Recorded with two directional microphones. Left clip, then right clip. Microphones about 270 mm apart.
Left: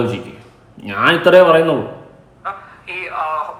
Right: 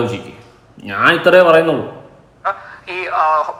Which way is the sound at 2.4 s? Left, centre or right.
Right.